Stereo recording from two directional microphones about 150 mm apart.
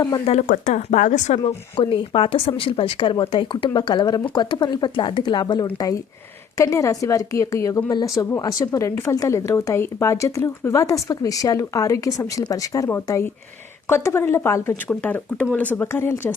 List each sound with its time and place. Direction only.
0.4 s speech: 65° left (ahead or behind)
1.5 s a woman's voice: 35° left (ahead or behind); by 16.3 s 15° left (ahead or behind)